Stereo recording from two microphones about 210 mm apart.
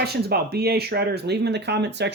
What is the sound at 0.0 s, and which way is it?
Speech, 50° right (ahead or behind).